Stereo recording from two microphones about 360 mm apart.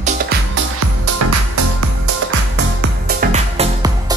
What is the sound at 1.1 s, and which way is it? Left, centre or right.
Music, right.